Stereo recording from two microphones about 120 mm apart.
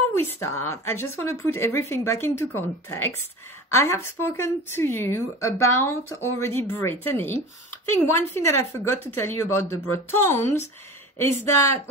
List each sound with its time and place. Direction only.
0.2 s speech: 20° left (ahead or behind)